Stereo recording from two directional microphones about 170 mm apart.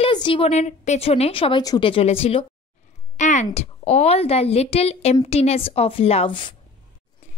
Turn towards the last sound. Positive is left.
turn(degrees=30)  # may be behind; listen again after turning